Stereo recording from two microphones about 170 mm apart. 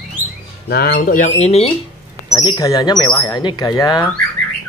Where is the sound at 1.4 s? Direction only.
40° left (ahead or behind).